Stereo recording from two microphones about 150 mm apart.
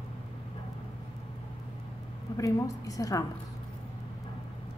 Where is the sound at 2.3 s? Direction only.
20° left (ahead or behind).